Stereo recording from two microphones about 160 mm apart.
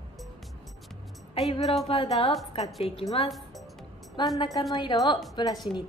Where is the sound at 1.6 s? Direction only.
Centre (ahead or behind).